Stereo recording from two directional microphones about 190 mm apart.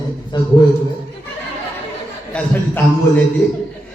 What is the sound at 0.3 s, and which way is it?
Speech, 25° left (ahead or behind).